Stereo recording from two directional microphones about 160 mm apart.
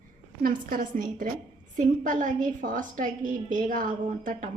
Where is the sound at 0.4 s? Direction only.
60° right (ahead or behind).